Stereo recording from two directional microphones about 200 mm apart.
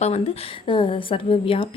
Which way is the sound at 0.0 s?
30° left (ahead or behind).